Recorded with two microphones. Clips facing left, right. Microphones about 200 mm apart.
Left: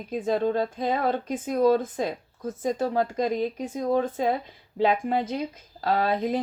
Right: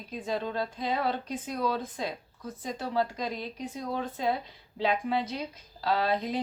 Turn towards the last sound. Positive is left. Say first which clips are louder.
# left 4 dB
turn(degrees=50)  # may be behind; listen again after turning